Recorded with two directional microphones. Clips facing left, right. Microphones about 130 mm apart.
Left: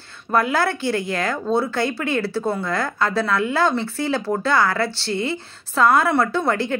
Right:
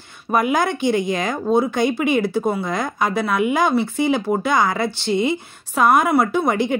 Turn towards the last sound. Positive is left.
turn(degrees=-15)  # may be behind; listen again after turning